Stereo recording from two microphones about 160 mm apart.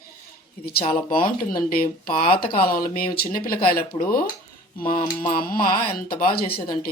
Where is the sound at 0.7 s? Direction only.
70° left (ahead or behind).